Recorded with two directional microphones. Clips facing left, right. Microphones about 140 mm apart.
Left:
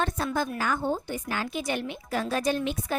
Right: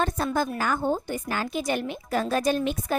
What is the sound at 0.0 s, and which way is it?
A woman's voice, 40° right (ahead or behind).